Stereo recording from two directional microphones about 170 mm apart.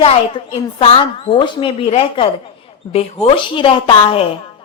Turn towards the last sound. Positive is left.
turn(degrees=30)  # may be behind; listen again after turning